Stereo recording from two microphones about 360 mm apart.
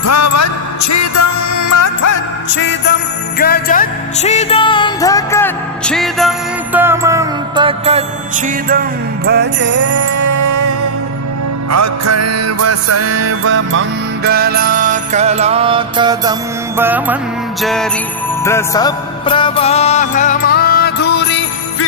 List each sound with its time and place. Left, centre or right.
0.0 s music: left
2.5 s music: left; by 8.0 s centre
9.2 s jingle bell: right
10.1 s music: right; by 21.8 s left